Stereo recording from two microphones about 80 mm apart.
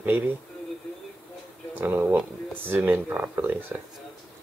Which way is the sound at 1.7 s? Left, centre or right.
Right.